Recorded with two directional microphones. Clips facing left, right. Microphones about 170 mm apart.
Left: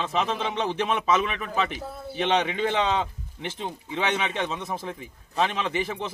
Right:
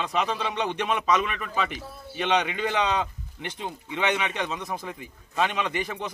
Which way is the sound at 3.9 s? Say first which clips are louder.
Right 1 dB; 30° left (ahead or behind).